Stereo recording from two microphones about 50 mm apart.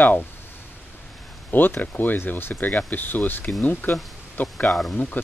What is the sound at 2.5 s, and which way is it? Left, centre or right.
Speech, left.